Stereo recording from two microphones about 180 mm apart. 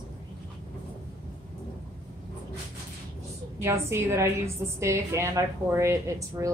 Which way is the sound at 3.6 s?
15° right (ahead or behind).